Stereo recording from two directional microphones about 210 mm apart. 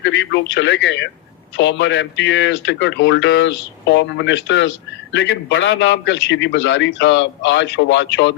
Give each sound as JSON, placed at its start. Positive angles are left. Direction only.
{"t": 0.0, "sound": "a man's voice", "side_deg": 55}